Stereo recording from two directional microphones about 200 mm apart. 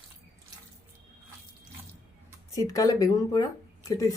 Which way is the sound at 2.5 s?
15° left (ahead or behind).